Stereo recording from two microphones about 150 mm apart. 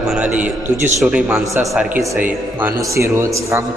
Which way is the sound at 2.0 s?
20° right (ahead or behind).